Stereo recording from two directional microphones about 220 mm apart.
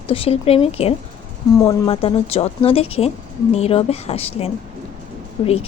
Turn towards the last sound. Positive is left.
turn(degrees=25)  # may be behind; listen again after turning